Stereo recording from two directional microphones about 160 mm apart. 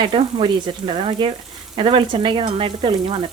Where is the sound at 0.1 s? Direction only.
35° right (ahead or behind).